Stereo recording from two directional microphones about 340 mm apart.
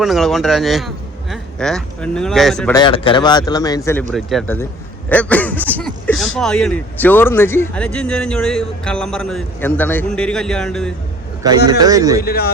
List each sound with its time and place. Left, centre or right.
0.0 s speech: centre
11.4 s a man's voice: centre
12.2 s speech: left